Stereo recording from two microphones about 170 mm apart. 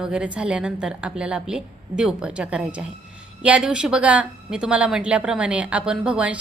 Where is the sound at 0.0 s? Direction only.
5° right (ahead or behind).